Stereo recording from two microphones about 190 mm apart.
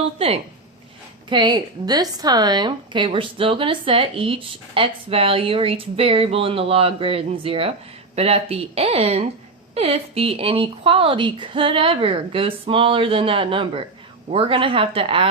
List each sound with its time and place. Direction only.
0.0 s a woman's voice: 30° right (ahead or behind)